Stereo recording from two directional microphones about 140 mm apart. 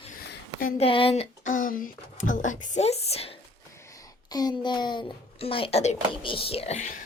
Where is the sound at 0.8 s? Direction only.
40° left (ahead or behind).